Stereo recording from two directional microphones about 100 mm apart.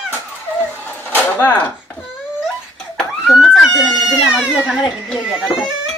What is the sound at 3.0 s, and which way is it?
Baby cry, centre (ahead or behind).